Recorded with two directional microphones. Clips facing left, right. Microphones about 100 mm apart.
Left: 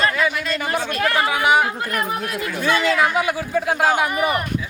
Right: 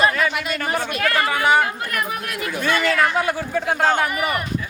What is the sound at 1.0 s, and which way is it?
Speech, 25° left (ahead or behind).